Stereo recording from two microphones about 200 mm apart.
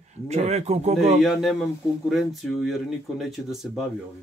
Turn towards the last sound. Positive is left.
turn(degrees=0)  # may be behind; listen again after turning